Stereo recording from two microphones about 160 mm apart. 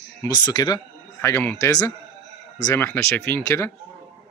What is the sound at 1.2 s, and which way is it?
Speech, 15° left (ahead or behind).